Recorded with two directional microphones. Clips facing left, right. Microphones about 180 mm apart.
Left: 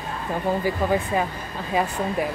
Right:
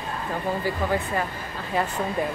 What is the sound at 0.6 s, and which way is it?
Speech, 15° left (ahead or behind).